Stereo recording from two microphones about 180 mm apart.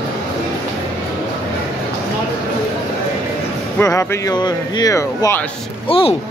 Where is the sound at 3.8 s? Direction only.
15° left (ahead or behind).